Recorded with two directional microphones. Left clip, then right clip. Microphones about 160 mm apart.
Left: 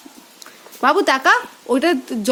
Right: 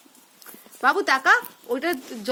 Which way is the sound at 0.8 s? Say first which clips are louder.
Left 5 dB; 20° left (ahead or behind).